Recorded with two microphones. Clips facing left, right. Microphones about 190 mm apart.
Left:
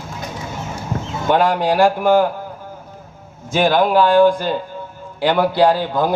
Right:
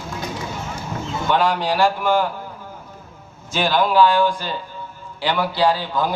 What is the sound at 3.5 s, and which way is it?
A man's voice, 50° left (ahead or behind).